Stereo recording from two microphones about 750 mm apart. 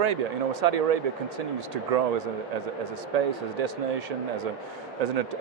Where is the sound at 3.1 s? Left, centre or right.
Right.